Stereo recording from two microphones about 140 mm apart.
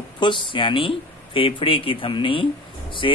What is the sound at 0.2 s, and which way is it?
Speech, 35° left (ahead or behind).